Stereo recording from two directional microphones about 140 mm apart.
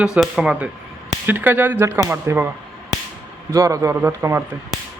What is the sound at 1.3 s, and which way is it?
Cutlery, 15° right (ahead or behind).